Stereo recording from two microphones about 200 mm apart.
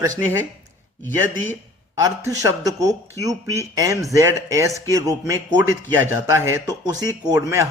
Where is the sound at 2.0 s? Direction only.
15° right (ahead or behind).